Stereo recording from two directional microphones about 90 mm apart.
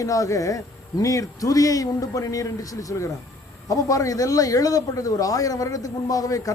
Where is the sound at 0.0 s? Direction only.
40° left (ahead or behind).